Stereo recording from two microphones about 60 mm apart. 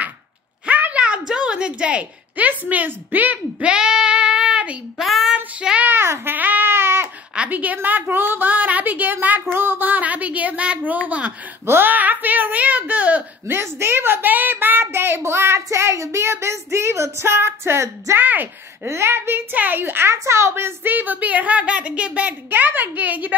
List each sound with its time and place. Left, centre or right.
0.7 s a sound: right
1.0 s a woman's voice: centre
3.7 s child singing: centre
5.0 s child singing: centre
5.3 s child singing: centre
5.9 s a sound: right
6.3 s baby cry: right
7.3 s a woman's voice: right
11.6 s a sound: right
13.5 s a child's voice: right
18.2 s a woman's voice: right
18.9 s a child's voice: right
19.5 s a woman's voice: right
20.9 s a woman's voice: right